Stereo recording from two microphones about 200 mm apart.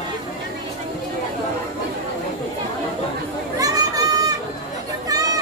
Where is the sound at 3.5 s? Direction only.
15° right (ahead or behind).